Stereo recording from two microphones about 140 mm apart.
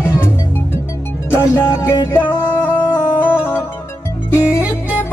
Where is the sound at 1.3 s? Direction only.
20° left (ahead or behind).